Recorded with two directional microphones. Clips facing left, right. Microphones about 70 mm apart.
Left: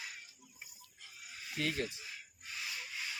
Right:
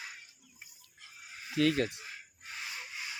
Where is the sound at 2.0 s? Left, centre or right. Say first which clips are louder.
Right 2 dB; right.